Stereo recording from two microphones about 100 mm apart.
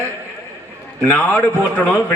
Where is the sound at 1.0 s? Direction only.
15° left (ahead or behind).